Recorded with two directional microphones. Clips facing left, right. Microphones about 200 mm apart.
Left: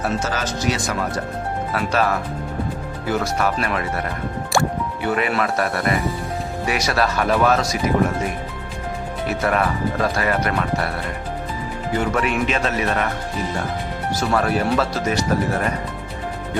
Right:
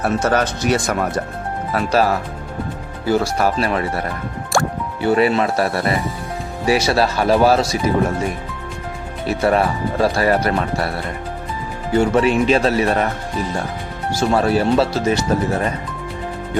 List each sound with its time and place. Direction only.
0.0 s speech: 60° right (ahead or behind)
1.7 s speech: 35° right (ahead or behind)
4.5 s music: centre (ahead or behind)
5.0 s speech: 30° right (ahead or behind)
9.2 s speech: 30° right (ahead or behind)
11.9 s speech: 30° right (ahead or behind)
14.1 s speech: 30° right (ahead or behind)